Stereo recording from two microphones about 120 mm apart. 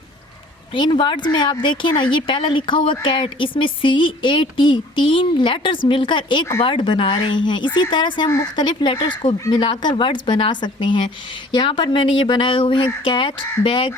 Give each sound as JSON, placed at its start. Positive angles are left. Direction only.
{"t": 0.7, "sound": "speech", "side_deg": 40}